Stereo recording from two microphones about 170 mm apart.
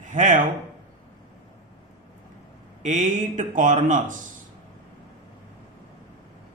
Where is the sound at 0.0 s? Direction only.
50° right (ahead or behind).